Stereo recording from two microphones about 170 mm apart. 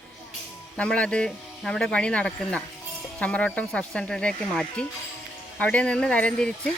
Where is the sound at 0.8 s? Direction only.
5° left (ahead or behind).